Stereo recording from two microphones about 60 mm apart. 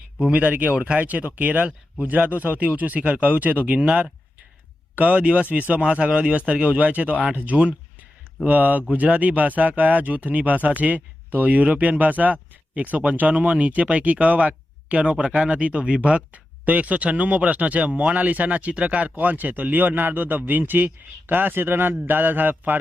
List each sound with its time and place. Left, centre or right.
0.2 s speech: right
22.0 s mantra: right